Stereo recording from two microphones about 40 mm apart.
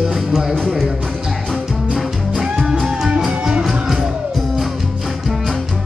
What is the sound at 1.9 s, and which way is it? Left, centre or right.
Music, centre.